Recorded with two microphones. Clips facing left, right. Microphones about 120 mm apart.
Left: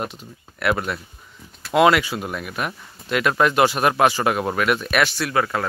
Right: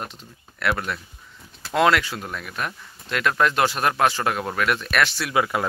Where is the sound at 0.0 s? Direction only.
5° left (ahead or behind).